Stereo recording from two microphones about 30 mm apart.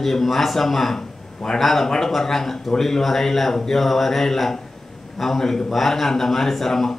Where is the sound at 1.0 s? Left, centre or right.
Left.